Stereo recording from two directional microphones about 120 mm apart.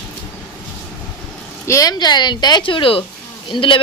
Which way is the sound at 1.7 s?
30° left (ahead or behind).